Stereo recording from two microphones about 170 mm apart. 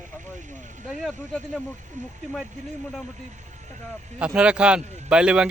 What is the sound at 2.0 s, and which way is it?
Speech, 45° right (ahead or behind).